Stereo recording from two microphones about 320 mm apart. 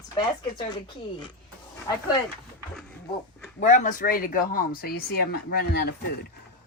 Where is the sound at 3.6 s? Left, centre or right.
Left.